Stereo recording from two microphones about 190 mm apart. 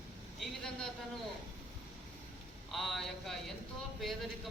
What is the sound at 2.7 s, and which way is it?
Speech, centre (ahead or behind).